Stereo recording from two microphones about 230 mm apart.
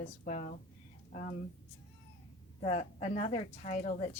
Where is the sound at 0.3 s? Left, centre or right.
Left.